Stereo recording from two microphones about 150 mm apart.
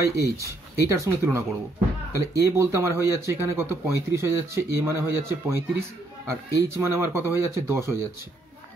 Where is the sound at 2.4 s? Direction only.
20° right (ahead or behind).